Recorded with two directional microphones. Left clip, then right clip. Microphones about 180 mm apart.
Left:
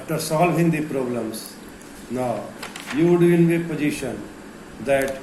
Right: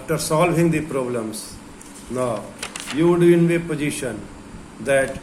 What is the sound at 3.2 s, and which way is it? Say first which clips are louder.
Speech: right 2 dB; 55° right (ahead or behind).